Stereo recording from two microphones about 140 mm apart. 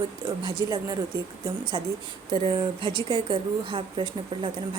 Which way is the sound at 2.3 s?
35° right (ahead or behind).